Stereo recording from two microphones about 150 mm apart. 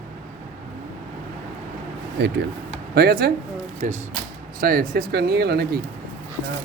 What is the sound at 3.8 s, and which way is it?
Speech, 60° right (ahead or behind).